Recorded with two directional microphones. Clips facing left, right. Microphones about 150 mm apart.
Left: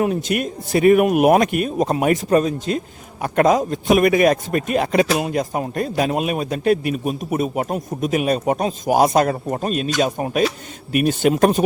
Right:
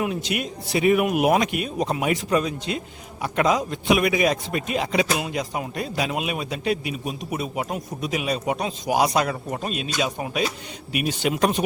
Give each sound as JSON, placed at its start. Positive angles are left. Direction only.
{"t": 0.0, "sound": "speech", "side_deg": 45}